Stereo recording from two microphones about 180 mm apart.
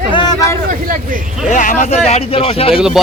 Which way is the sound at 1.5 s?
45° left (ahead or behind).